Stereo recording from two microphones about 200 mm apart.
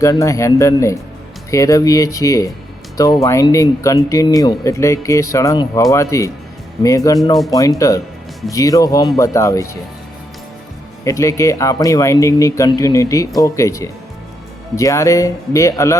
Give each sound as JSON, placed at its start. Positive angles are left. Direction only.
{"t": 0.0, "sound": "speech", "side_deg": 15}
{"t": 11.0, "sound": "speech", "side_deg": 15}